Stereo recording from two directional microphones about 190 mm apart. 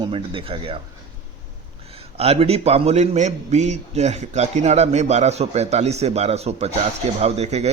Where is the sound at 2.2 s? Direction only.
30° right (ahead or behind).